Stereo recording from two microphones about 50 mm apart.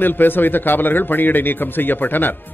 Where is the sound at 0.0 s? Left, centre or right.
Left.